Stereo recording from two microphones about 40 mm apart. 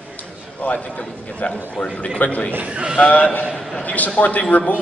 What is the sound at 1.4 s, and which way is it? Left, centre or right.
Speech, left.